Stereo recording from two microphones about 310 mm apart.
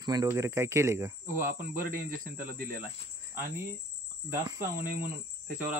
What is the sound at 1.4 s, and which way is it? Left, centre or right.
Speech, right.